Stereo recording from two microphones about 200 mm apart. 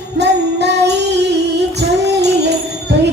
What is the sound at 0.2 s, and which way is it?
Jingle bell, 60° right (ahead or behind).